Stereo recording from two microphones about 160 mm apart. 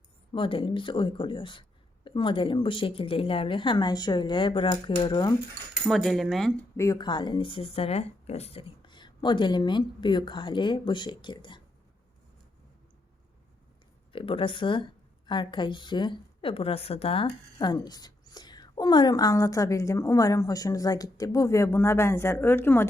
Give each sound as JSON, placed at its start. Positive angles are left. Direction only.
{"t": 0.3, "sound": "a woman's voice", "side_deg": 35}
{"t": 5.9, "sound": "speech", "side_deg": 0}
{"t": 6.7, "sound": "a woman's voice", "side_deg": 20}
{"t": 14.1, "sound": "a woman's voice", "side_deg": 35}
{"t": 17.6, "sound": "a woman's voice", "side_deg": 25}